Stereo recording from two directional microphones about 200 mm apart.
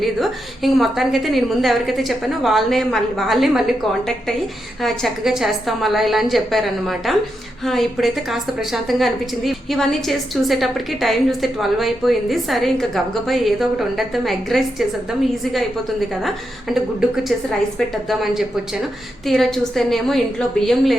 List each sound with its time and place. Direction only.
0.0 s a woman's voice: centre (ahead or behind)
16.2 s a woman's voice: centre (ahead or behind)